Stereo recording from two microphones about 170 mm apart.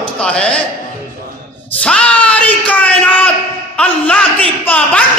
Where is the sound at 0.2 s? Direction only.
5° left (ahead or behind).